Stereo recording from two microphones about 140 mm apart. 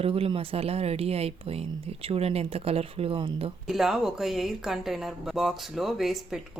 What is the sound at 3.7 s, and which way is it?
Speech, centre (ahead or behind).